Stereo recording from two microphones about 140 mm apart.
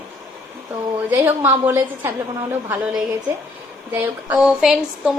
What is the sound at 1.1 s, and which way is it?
Speech, 15° right (ahead or behind).